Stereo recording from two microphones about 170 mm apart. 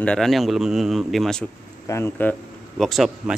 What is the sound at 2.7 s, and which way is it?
Speech, centre (ahead or behind).